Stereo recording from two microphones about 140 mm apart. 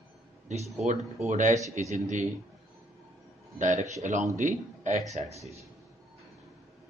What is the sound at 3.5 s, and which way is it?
A man's voice, 65° right (ahead or behind).